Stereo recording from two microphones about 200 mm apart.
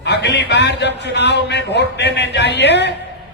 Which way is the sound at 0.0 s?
60° left (ahead or behind).